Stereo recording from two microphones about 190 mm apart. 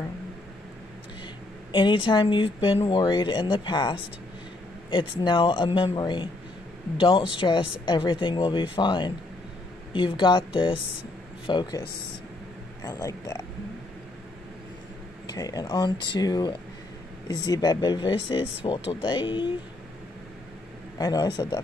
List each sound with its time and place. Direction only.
1.7 s speech: 25° left (ahead or behind)
4.9 s speech: 25° left (ahead or behind)
15.3 s speech: 20° left (ahead or behind)
21.0 s speech: 20° left (ahead or behind)